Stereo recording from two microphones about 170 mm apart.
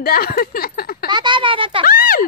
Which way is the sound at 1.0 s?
25° right (ahead or behind).